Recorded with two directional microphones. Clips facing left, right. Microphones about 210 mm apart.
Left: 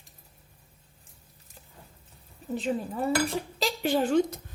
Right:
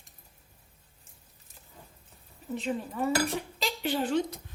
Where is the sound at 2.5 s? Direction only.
35° left (ahead or behind).